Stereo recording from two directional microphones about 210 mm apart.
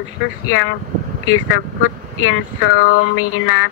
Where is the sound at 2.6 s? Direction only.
45° left (ahead or behind).